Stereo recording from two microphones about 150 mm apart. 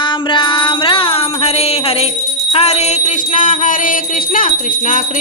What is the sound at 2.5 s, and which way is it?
Music, 45° left (ahead or behind).